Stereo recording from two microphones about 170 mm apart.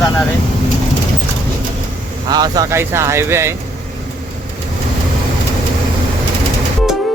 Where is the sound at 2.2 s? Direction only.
25° right (ahead or behind).